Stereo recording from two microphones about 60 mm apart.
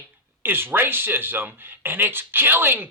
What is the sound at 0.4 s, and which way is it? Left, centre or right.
Speech, right.